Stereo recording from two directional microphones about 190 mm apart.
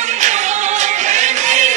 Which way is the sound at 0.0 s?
40° right (ahead or behind).